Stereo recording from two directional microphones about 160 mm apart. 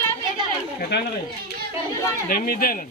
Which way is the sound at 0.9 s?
90° left.